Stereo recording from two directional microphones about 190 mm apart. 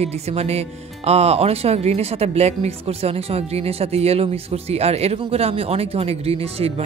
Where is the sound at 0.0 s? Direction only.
35° right (ahead or behind).